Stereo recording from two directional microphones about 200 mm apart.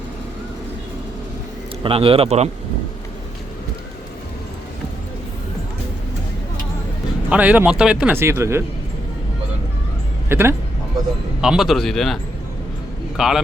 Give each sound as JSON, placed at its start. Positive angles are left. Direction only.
{"t": 1.8, "sound": "a man's voice", "side_deg": -30}
{"t": 7.3, "sound": "speech", "side_deg": -5}
{"t": 10.2, "sound": "a man's voice", "side_deg": -10}